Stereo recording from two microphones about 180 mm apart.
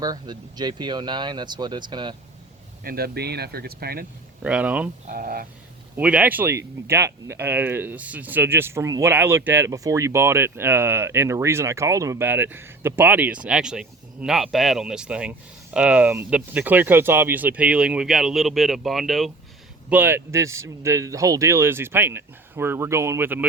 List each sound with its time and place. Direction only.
0.0 s speech: 20° right (ahead or behind)
2.8 s speech: 60° right (ahead or behind)
4.4 s speech: 5° right (ahead or behind)
5.0 s speech: 50° right (ahead or behind)
6.0 s speech: 5° right (ahead or behind)
19.9 s speech: 10° right (ahead or behind)